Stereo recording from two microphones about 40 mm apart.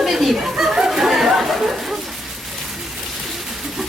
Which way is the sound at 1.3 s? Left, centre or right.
Centre.